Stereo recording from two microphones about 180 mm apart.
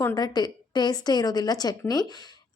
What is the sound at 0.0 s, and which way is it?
A woman's voice, 20° left (ahead or behind).